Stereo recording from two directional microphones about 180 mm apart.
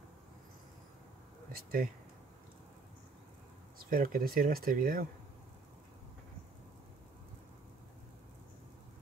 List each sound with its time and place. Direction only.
1.5 s speech: 55° right (ahead or behind)
3.7 s speech: 50° right (ahead or behind)